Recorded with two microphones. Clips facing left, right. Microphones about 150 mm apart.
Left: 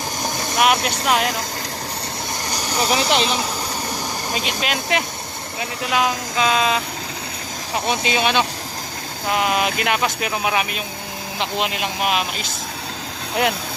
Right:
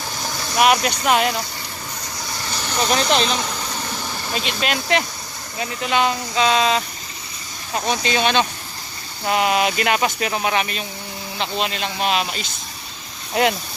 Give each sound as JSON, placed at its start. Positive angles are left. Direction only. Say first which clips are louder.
{"t": 0.2, "sound": "boat", "louder": "left 4 dB", "side_deg": 20}
{"t": 0.5, "sound": "speech", "louder": "right 2 dB", "side_deg": 0}
{"t": 2.5, "sound": "vehicle", "louder": "even", "side_deg": 10}
{"t": 4.7, "sound": "speech", "louder": "right 3 dB", "side_deg": 5}
{"t": 7.9, "sound": "speech", "louder": "right 1 dB", "side_deg": 5}
{"t": 11.3, "sound": "speech", "louder": "left 1 dB", "side_deg": 15}